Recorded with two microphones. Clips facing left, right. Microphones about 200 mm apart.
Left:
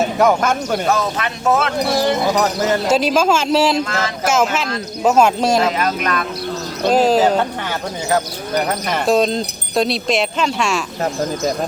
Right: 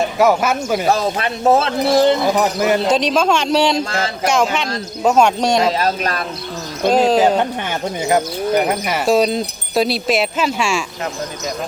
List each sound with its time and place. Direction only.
0.0 s speech: 5° right (ahead or behind)
0.9 s speech: 30° right (ahead or behind)
2.3 s wind chime: 15° right (ahead or behind)
2.9 s speech: 5° left (ahead or behind)
3.8 s speech: 30° right (ahead or behind)
4.3 s speech: 5° left (ahead or behind)
5.6 s speech: 30° right (ahead or behind)
6.8 s speech: 5° left (ahead or behind)
8.1 s wind chime: 10° right (ahead or behind)
9.0 s speech: 5° right (ahead or behind)